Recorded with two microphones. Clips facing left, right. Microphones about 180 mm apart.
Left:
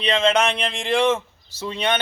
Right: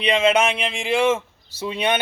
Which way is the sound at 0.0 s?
10° right (ahead or behind).